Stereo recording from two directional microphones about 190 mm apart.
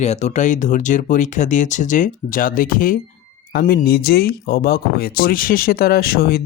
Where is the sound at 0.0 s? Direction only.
35° left (ahead or behind).